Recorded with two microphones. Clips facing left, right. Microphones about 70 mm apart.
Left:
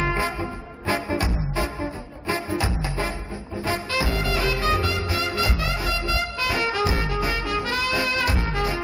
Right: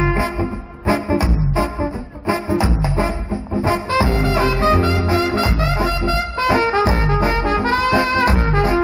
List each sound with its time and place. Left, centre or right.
0.0 s music: centre; by 8.8 s right